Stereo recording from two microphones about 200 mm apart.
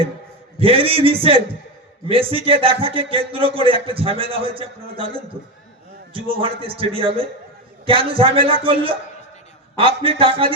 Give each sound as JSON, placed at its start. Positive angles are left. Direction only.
{"t": 0.6, "sound": "a man's voice", "side_deg": -30}
{"t": 6.4, "sound": "a man's voice", "side_deg": -25}